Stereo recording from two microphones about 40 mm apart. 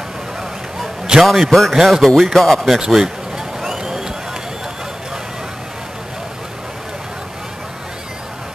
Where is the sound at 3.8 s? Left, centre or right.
Centre.